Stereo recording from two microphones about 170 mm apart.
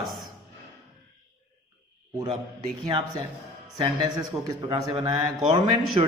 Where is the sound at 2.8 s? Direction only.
30° right (ahead or behind).